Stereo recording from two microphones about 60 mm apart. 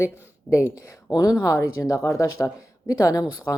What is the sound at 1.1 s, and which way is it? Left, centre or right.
Speech, left.